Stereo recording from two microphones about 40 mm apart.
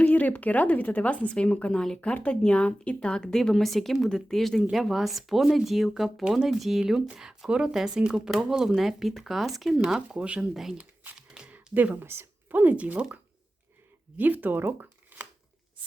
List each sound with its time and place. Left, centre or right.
0.0 s speech: left
3.5 s speech: centre
10.2 s speech: right
10.5 s speech: centre
11.5 s a sound: right
12.0 s a woman's voice: right
12.5 s speech: right
14.2 s speech: right
14.8 s shuffling cards: right